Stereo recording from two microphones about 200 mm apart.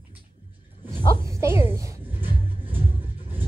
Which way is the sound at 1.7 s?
15° right (ahead or behind).